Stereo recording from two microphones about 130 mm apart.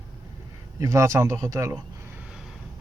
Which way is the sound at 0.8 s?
20° right (ahead or behind).